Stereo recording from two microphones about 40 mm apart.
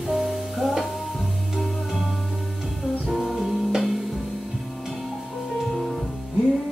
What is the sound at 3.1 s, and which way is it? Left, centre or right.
Music, centre.